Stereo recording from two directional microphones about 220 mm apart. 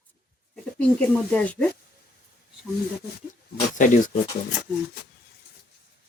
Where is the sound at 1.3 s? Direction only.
5° left (ahead or behind).